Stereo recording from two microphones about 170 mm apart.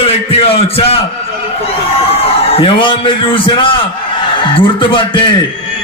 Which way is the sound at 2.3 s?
30° left (ahead or behind).